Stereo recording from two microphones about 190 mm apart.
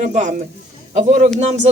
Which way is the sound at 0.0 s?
40° right (ahead or behind).